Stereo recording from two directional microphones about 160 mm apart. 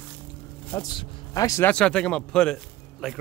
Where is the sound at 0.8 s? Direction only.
20° left (ahead or behind).